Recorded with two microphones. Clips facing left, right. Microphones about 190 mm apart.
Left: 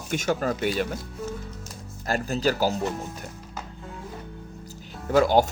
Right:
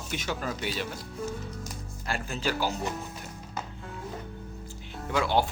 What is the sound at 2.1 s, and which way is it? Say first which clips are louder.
Speech: left 7 dB; 40° left (ahead or behind).